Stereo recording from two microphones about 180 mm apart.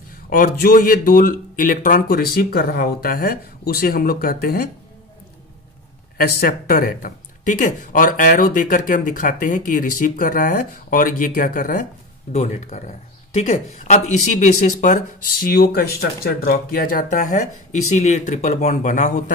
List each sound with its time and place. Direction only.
0.3 s speech: 50° left (ahead or behind)
6.1 s speech: 55° left (ahead or behind)
12.3 s speech: 40° left (ahead or behind)